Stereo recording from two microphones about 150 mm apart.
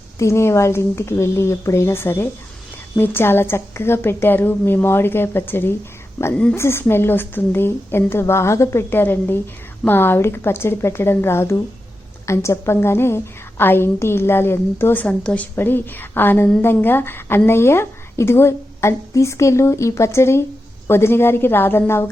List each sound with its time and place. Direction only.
0.2 s a woman's voice: 20° left (ahead or behind)